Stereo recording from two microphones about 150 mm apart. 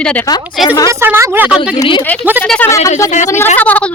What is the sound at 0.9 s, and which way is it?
Speech, 15° right (ahead or behind).